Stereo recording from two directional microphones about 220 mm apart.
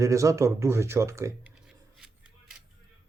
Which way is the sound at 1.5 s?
5° right (ahead or behind).